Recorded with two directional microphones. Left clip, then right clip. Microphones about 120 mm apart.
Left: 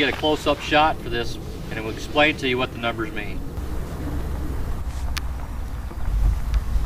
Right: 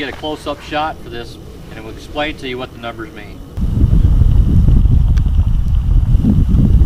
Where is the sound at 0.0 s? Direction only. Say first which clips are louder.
Left 1 dB; 5° left (ahead or behind).